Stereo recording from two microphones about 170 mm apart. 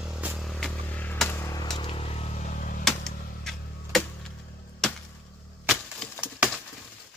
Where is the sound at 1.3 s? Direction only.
20° left (ahead or behind).